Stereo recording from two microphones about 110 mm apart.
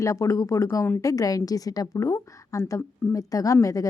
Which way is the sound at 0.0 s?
30° left (ahead or behind).